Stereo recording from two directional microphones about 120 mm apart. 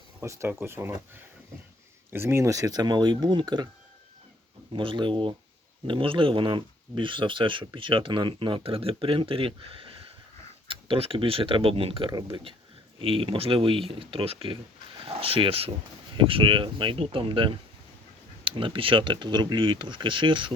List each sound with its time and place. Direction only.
0.2 s speech: 20° right (ahead or behind); by 3.4 s 40° right (ahead or behind)
4.7 s speech: 45° right (ahead or behind)